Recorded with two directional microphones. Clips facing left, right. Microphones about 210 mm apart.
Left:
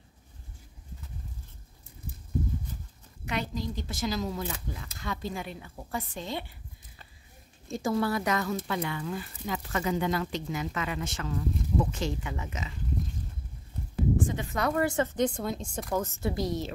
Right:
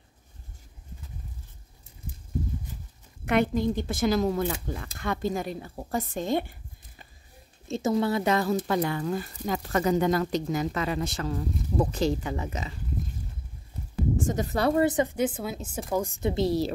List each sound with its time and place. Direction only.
3.3 s speech: 55° right (ahead or behind)
7.6 s a woman's voice: 25° right (ahead or behind)
14.2 s a woman's voice: 40° right (ahead or behind)